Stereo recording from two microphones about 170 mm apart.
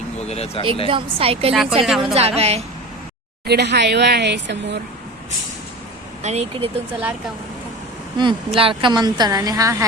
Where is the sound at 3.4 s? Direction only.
75° right (ahead or behind).